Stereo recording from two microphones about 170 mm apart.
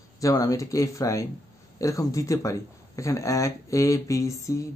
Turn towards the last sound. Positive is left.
turn(degrees=20)  # may be behind; listen again after turning